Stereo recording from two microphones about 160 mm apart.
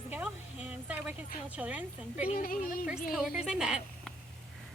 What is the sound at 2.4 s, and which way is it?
Speech, 65° left (ahead or behind).